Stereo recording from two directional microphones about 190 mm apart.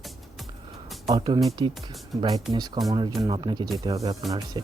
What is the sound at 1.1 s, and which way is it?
Speech, 20° right (ahead or behind).